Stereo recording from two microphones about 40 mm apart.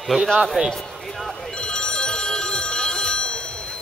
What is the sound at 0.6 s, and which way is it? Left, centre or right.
Speech, centre.